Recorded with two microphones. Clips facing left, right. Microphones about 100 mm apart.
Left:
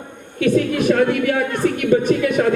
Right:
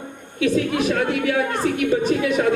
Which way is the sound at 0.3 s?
50° left (ahead or behind).